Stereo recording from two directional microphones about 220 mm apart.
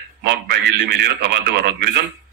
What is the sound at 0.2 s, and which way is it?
Speech, 50° right (ahead or behind).